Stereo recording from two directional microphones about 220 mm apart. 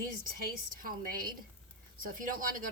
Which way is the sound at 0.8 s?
40° right (ahead or behind).